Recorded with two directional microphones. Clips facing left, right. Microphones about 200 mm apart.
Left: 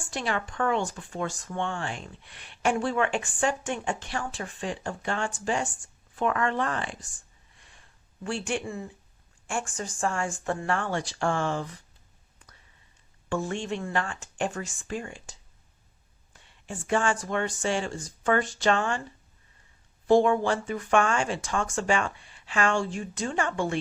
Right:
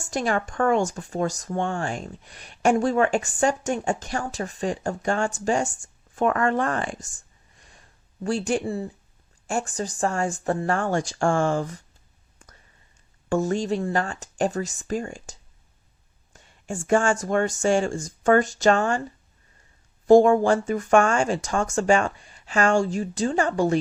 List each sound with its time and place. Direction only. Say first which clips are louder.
0.0 s speech: right 6 dB; 45° right (ahead or behind)
8.2 s speech: right 6 dB; 40° right (ahead or behind)
12.4 s whispering: right 4 dB; 45° right (ahead or behind)
13.3 s speech: right 7 dB; 40° right (ahead or behind)
20.1 s speech: right 6 dB; 45° right (ahead or behind)